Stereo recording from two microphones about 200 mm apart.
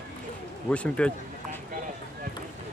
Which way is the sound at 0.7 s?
5° left (ahead or behind).